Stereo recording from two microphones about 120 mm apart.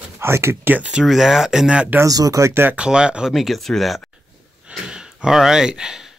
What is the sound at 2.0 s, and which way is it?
Speech, 30° right (ahead or behind).